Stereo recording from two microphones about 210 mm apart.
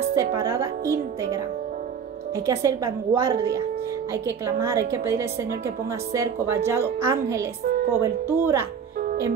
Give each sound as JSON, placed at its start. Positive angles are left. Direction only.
{"t": 0.1, "sound": "speech", "side_deg": -15}
{"t": 2.4, "sound": "speech", "side_deg": -15}